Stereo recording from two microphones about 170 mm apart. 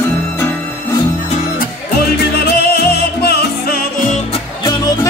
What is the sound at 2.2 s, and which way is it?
Music, 70° left (ahead or behind).